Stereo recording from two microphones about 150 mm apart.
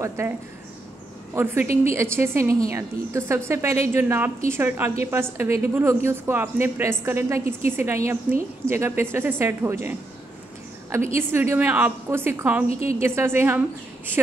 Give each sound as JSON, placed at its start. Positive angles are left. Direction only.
{"t": 0.2, "sound": "a woman's voice", "side_deg": -20}
{"t": 11.1, "sound": "a woman's voice", "side_deg": -15}
{"t": 12.6, "sound": "a woman's voice", "side_deg": 45}
{"t": 13.0, "sound": "a woman's voice", "side_deg": -15}